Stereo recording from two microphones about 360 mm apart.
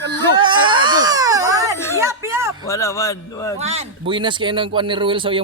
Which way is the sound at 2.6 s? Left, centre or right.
Centre.